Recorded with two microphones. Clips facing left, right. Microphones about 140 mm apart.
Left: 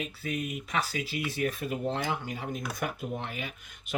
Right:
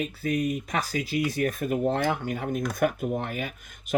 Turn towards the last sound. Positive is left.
turn(degrees=-45)  # may be behind; listen again after turning